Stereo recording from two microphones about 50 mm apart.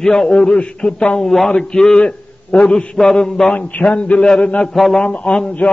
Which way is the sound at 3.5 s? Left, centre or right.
Left.